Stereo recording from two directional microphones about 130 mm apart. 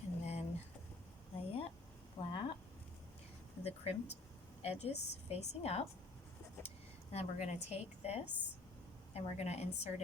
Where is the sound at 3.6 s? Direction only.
50° left (ahead or behind).